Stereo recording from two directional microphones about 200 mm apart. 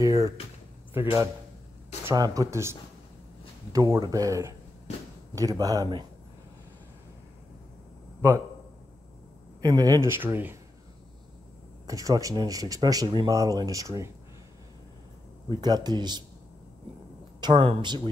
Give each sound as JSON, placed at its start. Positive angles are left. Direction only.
{"t": 0.0, "sound": "speech", "side_deg": -15}
{"t": 9.6, "sound": "speech", "side_deg": -20}
{"t": 11.9, "sound": "speech", "side_deg": -15}
{"t": 15.6, "sound": "a man's voice", "side_deg": -20}
{"t": 17.4, "sound": "speech", "side_deg": -25}